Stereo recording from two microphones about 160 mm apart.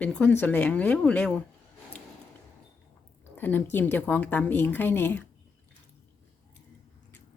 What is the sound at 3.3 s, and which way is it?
Speech, 10° left (ahead or behind).